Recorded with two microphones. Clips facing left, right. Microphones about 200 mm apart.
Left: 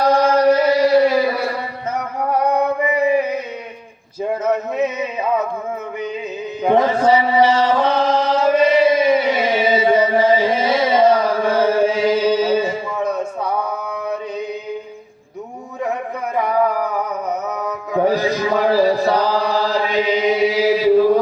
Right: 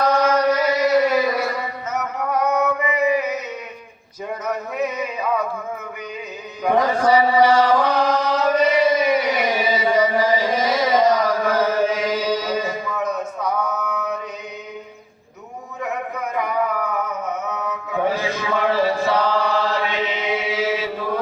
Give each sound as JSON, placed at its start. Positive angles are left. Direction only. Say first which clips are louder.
{"t": 0.0, "sound": "chant", "louder": "left 4 dB", "side_deg": 30}
{"t": 4.4, "sound": "music", "louder": "left 4 dB", "side_deg": 25}
{"t": 6.6, "sound": "chant", "louder": "left 3 dB", "side_deg": 25}
{"t": 16.4, "sound": "music", "louder": "left 5 dB", "side_deg": 35}